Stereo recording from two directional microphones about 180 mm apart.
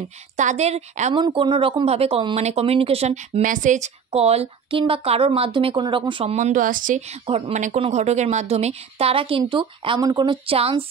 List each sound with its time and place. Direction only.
0.4 s speech: 40° right (ahead or behind)
1.1 s speech: 25° right (ahead or behind)
6.3 s speech: 45° right (ahead or behind)
7.2 s speech: 35° right (ahead or behind)